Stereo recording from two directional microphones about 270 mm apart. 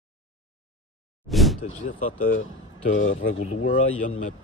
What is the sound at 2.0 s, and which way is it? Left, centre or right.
Speech, left.